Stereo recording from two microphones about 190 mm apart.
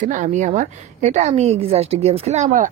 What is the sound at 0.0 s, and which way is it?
Speech, 40° right (ahead or behind).